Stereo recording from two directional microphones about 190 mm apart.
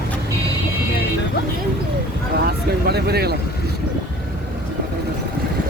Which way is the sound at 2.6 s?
60° right (ahead or behind).